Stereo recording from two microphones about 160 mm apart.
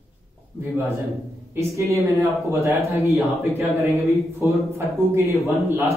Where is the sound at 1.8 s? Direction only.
20° right (ahead or behind).